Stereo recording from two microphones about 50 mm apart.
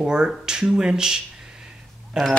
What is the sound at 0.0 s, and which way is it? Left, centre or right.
Speech, centre.